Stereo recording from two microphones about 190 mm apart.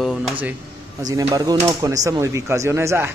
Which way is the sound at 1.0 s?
20° right (ahead or behind).